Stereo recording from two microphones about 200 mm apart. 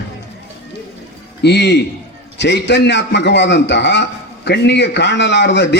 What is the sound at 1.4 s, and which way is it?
A man's voice, 55° left (ahead or behind).